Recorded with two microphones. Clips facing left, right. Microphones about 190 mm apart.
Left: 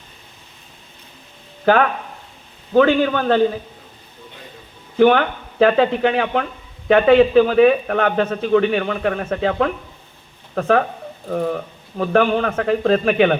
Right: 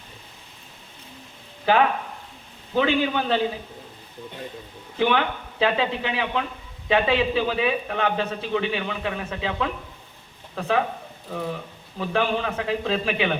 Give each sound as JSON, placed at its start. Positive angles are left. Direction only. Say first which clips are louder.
{"t": 2.7, "sound": "speech", "louder": "left 7 dB", "side_deg": 55}
{"t": 4.9, "sound": "speech", "louder": "left 8 dB", "side_deg": 50}